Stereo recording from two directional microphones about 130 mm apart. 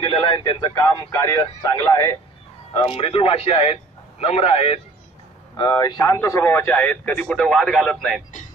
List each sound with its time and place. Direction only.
0.0 s a man's voice: 35° left (ahead or behind)
2.7 s a man's voice: 45° left (ahead or behind)
5.6 s speech: 30° left (ahead or behind); by 8.2 s 5° left (ahead or behind)